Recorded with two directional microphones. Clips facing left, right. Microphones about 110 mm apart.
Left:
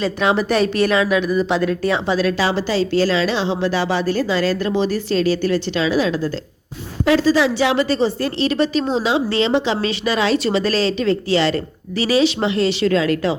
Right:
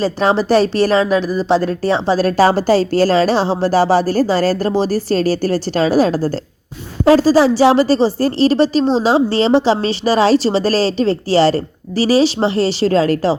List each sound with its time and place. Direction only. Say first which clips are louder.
0.0 s a woman's voice: right 3 dB; 35° right (ahead or behind)